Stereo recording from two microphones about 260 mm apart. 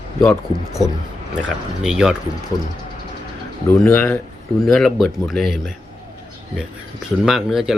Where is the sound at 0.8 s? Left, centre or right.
Centre.